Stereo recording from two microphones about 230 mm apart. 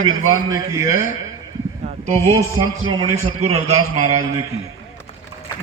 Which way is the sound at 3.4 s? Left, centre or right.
Right.